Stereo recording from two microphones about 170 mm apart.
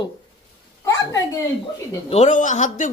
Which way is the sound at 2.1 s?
45° left (ahead or behind).